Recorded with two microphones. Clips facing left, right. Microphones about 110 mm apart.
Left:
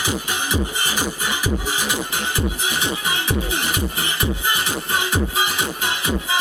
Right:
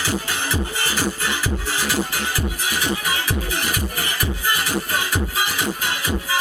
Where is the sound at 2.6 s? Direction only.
20° left (ahead or behind).